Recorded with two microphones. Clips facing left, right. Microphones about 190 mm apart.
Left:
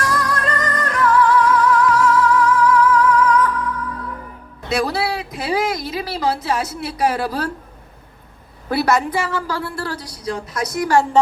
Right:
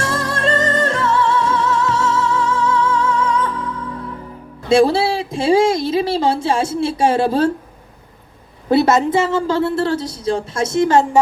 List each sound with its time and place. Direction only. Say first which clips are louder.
0.0 s music: right 1 dB; 25° right (ahead or behind)
4.7 s a woman's voice: right 7 dB; 25° right (ahead or behind)
8.7 s a woman's voice: right 5 dB; 25° right (ahead or behind)